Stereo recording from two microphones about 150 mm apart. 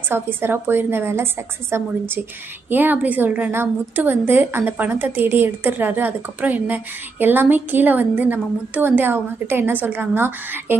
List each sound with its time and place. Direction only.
0.0 s a woman's voice: 15° right (ahead or behind)